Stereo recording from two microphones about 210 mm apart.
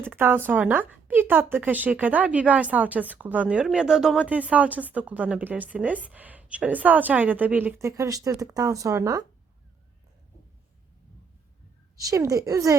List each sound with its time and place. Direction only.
0.1 s a woman's voice: 10° right (ahead or behind)
11.9 s a woman's voice: 15° right (ahead or behind)